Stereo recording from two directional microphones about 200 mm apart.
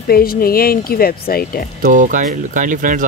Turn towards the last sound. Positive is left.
turn(degrees=-40)  # may be behind; listen again after turning